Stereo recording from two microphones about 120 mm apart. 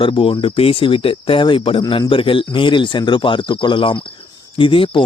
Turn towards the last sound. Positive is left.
turn(degrees=45)  # may be behind; listen again after turning